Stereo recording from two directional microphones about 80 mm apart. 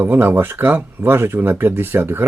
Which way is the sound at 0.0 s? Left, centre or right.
Right.